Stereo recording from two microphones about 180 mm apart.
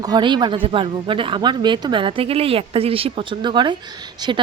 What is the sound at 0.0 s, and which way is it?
Speech, 25° right (ahead or behind).